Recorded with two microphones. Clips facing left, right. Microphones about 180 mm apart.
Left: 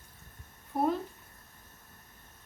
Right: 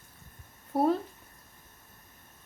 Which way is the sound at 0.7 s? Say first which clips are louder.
Right 3 dB; 35° right (ahead or behind).